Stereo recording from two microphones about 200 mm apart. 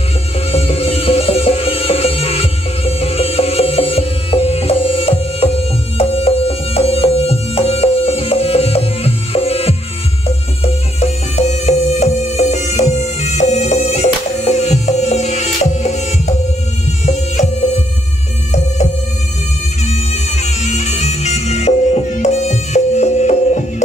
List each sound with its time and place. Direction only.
0.5 s music: 30° left (ahead or behind)
19.8 s music: 35° left (ahead or behind)